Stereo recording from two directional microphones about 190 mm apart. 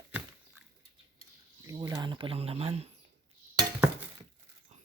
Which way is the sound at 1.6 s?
20° right (ahead or behind).